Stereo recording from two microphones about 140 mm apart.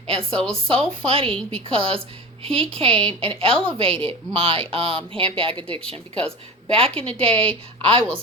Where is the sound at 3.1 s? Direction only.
40° right (ahead or behind).